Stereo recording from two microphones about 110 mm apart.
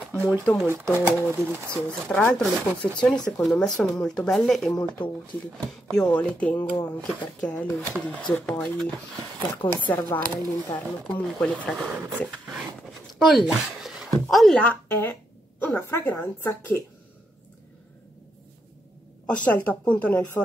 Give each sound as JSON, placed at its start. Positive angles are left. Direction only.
{"t": 0.2, "sound": "speech", "side_deg": 15}
{"t": 0.9, "sound": "speech", "side_deg": -20}
{"t": 1.7, "sound": "speech", "side_deg": 10}
{"t": 9.6, "sound": "speech", "side_deg": 50}
{"t": 9.9, "sound": "speech", "side_deg": 20}
{"t": 10.7, "sound": "speech", "side_deg": 10}
{"t": 13.2, "sound": "speech", "side_deg": 0}
{"t": 19.2, "sound": "a woman's voice", "side_deg": 10}